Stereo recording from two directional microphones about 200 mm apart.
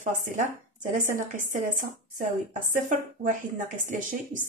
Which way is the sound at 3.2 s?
40° right (ahead or behind).